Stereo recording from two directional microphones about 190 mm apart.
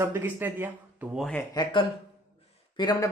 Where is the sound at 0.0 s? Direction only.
10° right (ahead or behind); by 1.5 s 5° left (ahead or behind).